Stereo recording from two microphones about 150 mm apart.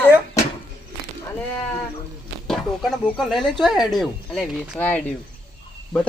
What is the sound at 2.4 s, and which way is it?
Speech, 5° left (ahead or behind).